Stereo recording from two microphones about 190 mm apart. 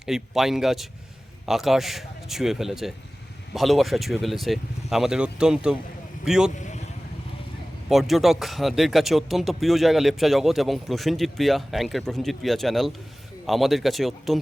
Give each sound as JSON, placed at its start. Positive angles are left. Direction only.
{"t": 0.0, "sound": "speech", "side_deg": 0}
{"t": 6.6, "sound": "vehicle", "side_deg": 40}
{"t": 7.9, "sound": "speech", "side_deg": 0}